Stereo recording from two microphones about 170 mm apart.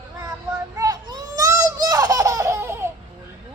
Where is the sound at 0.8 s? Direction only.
25° right (ahead or behind).